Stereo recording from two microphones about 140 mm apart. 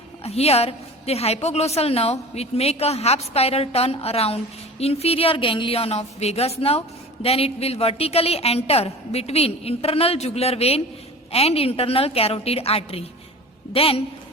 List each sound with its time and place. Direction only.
0.2 s a woman's voice: 45° left (ahead or behind)